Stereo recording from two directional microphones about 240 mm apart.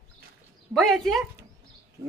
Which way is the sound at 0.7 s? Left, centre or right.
Centre.